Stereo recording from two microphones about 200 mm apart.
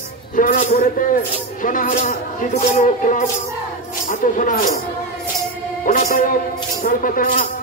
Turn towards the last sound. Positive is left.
turn(degrees=45)  # may be behind; listen again after turning